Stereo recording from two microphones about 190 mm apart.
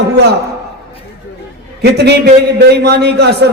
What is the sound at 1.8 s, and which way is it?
A man's voice, 60° right (ahead or behind).